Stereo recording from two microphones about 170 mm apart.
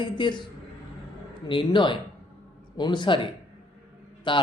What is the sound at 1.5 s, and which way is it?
Speech, 30° left (ahead or behind).